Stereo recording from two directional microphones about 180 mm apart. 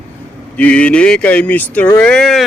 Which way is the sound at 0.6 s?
5° left (ahead or behind).